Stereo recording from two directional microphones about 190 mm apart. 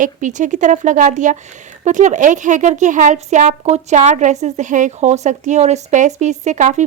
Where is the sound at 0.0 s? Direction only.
40° right (ahead or behind).